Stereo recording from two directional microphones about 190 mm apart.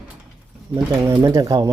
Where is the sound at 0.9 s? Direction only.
15° right (ahead or behind).